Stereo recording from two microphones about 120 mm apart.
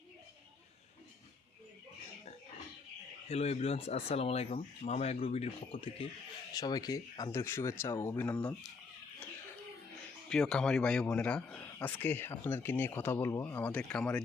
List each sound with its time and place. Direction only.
3.2 s speech: 60° left (ahead or behind)
6.5 s speech: 35° left (ahead or behind); by 8.4 s 15° left (ahead or behind)
10.2 s speech: 5° left (ahead or behind)